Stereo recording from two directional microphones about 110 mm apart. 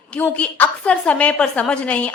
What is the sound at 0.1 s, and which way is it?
A woman's voice, 10° left (ahead or behind).